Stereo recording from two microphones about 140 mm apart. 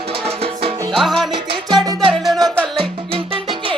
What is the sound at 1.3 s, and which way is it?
Music, 30° right (ahead or behind).